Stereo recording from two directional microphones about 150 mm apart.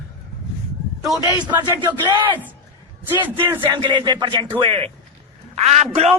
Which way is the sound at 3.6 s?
30° right (ahead or behind).